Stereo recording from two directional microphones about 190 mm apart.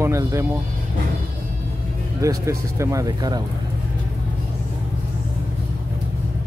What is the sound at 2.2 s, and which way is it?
Speech, 15° right (ahead or behind).